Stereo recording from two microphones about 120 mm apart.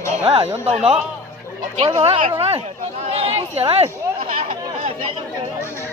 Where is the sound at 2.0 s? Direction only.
55° right (ahead or behind).